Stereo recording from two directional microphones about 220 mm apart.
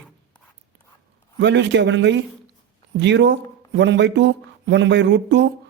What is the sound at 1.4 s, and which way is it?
Speech, 55° right (ahead or behind).